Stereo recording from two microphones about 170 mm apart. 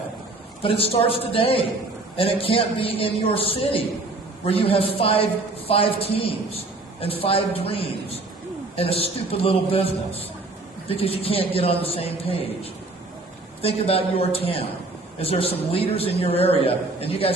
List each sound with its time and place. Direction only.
0.6 s a woman's voice: 35° left (ahead or behind)
13.6 s a woman's voice: 35° left (ahead or behind)